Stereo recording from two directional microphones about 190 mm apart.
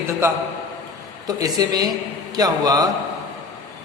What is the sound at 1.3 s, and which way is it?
Music, 20° right (ahead or behind).